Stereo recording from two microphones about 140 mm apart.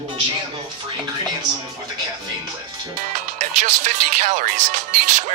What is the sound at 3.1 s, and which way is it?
Speech, 60° right (ahead or behind).